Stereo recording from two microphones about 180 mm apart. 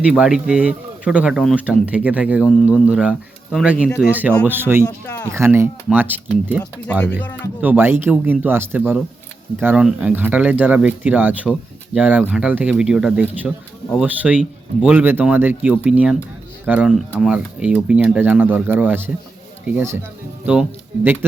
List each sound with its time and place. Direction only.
0.0 s speech: 5° right (ahead or behind)
4.1 s speech: 10° right (ahead or behind)
4.8 s speech: 20° left (ahead or behind)
5.3 s speech: 15° right (ahead or behind)
7.2 s speech: 10° left (ahead or behind)
7.6 s speech: 10° right (ahead or behind)